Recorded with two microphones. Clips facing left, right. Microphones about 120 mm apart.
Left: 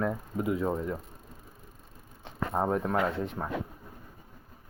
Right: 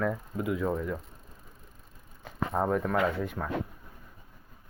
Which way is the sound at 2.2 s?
20° left (ahead or behind).